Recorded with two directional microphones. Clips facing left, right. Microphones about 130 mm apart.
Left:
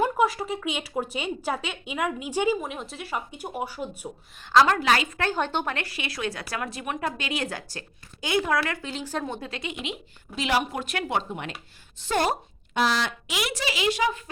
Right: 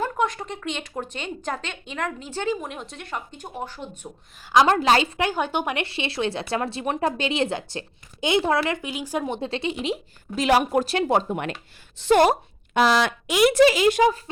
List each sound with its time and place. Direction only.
0.0 s a woman's voice: 10° left (ahead or behind)
4.5 s speech: 25° right (ahead or behind)
5.2 s speech: 10° right (ahead or behind)
8.8 s a woman's voice: 15° right (ahead or behind); by 10.8 s 50° right (ahead or behind)
10.8 s a woman's voice: 35° right (ahead or behind)
11.3 s speech: 55° right (ahead or behind)
11.9 s a woman's voice: 70° right (ahead or behind); by 14.2 s 45° right (ahead or behind)